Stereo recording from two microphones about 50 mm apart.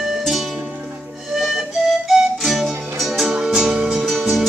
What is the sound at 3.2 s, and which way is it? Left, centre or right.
Music, centre.